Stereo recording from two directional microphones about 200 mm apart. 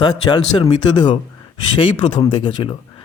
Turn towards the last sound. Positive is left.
turn(degrees=25)  # may be behind; listen again after turning